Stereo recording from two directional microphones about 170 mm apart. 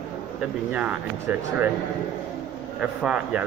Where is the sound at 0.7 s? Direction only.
10° right (ahead or behind).